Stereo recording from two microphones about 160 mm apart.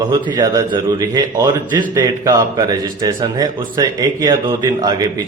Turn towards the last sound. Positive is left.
turn(degrees=-25)  # may be behind; listen again after turning